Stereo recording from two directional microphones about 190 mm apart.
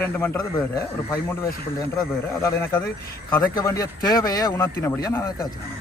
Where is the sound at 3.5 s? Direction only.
15° left (ahead or behind).